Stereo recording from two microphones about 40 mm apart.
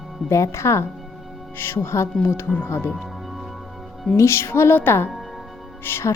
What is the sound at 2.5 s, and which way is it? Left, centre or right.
Speech, left.